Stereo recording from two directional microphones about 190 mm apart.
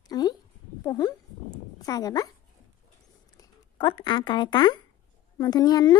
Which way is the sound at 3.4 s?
25° left (ahead or behind).